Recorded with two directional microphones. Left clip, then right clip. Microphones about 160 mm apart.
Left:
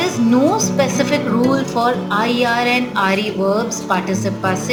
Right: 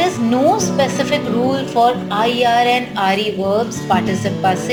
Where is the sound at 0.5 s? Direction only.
20° right (ahead or behind).